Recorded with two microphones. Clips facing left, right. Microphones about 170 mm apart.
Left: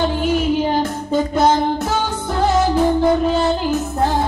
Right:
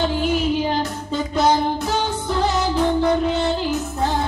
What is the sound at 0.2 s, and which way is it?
Music, 50° left (ahead or behind).